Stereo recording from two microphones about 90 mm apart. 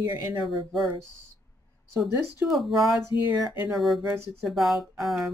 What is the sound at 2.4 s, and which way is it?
Speech, centre (ahead or behind).